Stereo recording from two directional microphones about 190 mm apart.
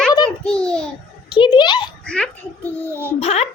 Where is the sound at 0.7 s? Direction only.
5° left (ahead or behind).